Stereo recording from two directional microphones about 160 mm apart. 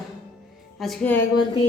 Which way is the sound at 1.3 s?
30° left (ahead or behind).